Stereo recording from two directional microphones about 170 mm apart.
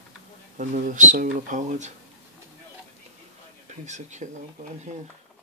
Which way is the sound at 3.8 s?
45° right (ahead or behind).